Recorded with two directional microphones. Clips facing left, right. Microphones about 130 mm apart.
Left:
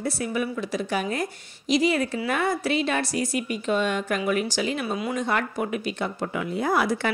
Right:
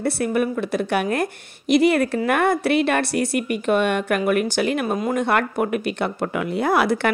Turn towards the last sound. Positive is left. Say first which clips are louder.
# right 4 dB
turn(degrees=-70)  # may be behind; listen again after turning